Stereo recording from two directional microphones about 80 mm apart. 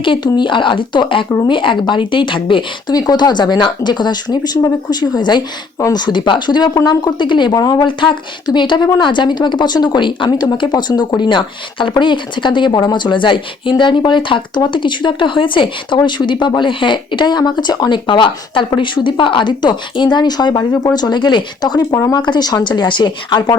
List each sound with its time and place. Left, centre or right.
0.0 s speech: left
2.9 s speech: left